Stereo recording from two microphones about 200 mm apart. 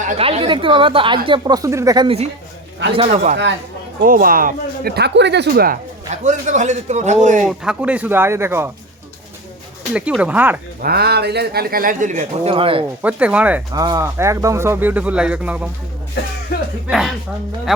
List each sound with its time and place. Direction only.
0.0 s speech: 30° right (ahead or behind)
2.0 s speech: 30° right (ahead or behind)
4.0 s speech: 45° right (ahead or behind)
6.2 s speech: 35° right (ahead or behind)
7.4 s speech: 5° right (ahead or behind)
9.9 s speech: 5° right (ahead or behind)
10.8 s speech: 50° right (ahead or behind); by 12.8 s 25° right (ahead or behind)
13.0 s speech: 5° right (ahead or behind)
13.7 s speech: 20° right (ahead or behind)
16.9 s speech: centre (ahead or behind)